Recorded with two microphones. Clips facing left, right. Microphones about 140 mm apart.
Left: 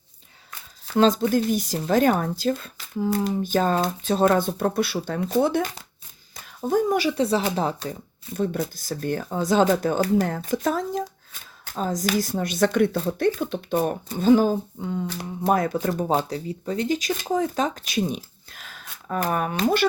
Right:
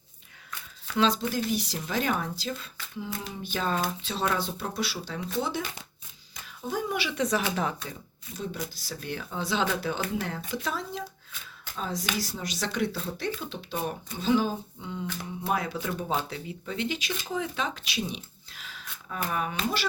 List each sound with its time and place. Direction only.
0.9 s speech: 45° left (ahead or behind)
8.6 s speech: 45° left (ahead or behind)